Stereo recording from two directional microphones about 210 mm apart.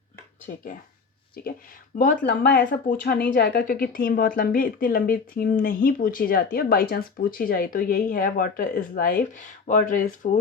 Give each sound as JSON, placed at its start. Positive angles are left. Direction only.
{"t": 0.4, "sound": "speech", "side_deg": 40}
{"t": 2.0, "sound": "a woman's voice", "side_deg": 45}